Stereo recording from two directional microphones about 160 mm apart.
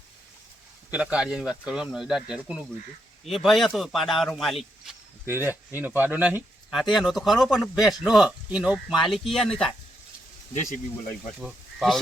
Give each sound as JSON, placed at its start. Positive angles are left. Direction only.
{"t": 0.9, "sound": "speech", "side_deg": -5}
{"t": 5.3, "sound": "speech", "side_deg": -15}
{"t": 11.3, "sound": "speech", "side_deg": -5}